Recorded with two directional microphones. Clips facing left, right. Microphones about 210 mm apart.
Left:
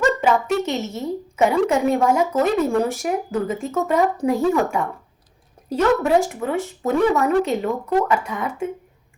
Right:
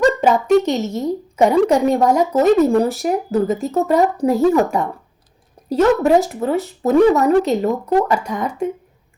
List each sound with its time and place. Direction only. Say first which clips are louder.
0.4 s speech: right 8 dB; centre (ahead or behind)
0.9 s speech: right 4 dB; 35° right (ahead or behind)